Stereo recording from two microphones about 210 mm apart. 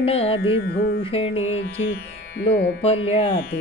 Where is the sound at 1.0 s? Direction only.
25° left (ahead or behind).